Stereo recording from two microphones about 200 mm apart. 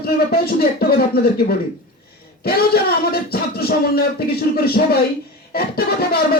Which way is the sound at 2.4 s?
50° left (ahead or behind).